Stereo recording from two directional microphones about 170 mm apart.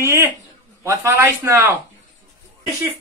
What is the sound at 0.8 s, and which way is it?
Speech, 15° right (ahead or behind).